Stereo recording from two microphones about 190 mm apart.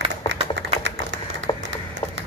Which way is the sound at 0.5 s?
70° right (ahead or behind).